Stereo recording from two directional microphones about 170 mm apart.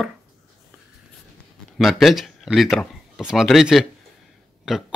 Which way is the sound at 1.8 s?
Centre (ahead or behind).